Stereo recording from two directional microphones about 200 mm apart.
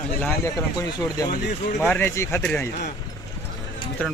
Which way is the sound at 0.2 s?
10° left (ahead or behind).